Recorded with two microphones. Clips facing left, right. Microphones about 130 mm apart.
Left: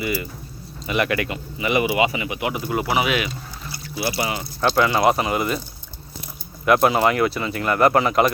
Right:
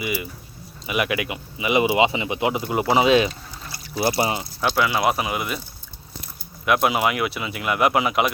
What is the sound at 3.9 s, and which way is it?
Speech, 40° right (ahead or behind).